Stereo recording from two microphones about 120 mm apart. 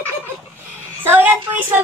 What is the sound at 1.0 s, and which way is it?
Speech, 15° right (ahead or behind).